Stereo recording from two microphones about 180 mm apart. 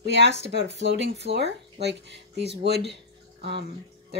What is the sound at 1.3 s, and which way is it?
Speech, 70° right (ahead or behind).